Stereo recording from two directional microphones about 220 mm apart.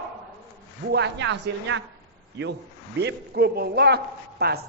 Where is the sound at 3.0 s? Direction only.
50° right (ahead or behind).